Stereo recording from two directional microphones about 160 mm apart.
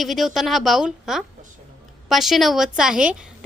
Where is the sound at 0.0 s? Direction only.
Centre (ahead or behind).